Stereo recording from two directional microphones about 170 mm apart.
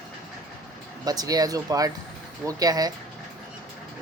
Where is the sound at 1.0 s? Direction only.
20° right (ahead or behind).